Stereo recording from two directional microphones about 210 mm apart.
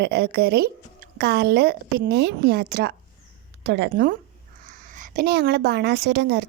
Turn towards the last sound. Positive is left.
turn(degrees=-55)  # may be behind; listen again after turning